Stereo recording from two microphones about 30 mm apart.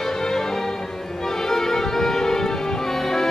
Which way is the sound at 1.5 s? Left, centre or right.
Centre.